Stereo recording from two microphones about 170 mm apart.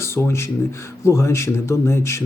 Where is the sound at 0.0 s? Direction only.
15° left (ahead or behind).